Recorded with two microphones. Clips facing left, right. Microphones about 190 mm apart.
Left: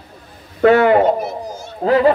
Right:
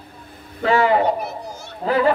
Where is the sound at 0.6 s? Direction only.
60° left (ahead or behind).